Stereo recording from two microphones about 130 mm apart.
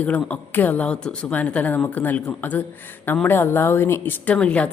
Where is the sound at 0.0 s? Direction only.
10° left (ahead or behind).